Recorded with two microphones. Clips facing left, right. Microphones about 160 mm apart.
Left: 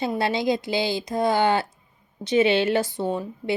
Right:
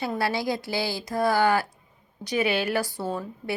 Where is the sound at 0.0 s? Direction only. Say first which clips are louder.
Left 3 dB; 20° left (ahead or behind).